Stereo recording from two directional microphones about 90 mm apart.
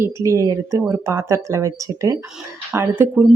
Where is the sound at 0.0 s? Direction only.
35° right (ahead or behind).